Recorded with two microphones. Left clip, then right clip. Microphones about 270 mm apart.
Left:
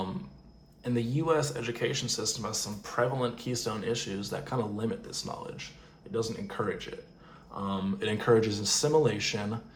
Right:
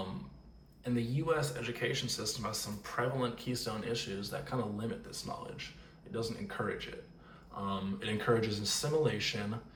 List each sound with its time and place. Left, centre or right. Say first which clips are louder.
0.9 s speech: left 6 dB; left